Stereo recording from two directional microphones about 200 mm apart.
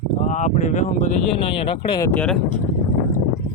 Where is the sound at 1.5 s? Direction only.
25° left (ahead or behind).